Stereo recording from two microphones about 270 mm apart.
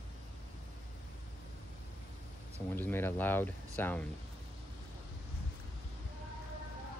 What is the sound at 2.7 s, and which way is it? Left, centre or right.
Speech, centre.